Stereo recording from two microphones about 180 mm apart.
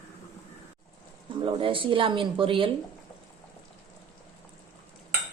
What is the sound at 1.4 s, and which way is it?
Speech, 30° right (ahead or behind).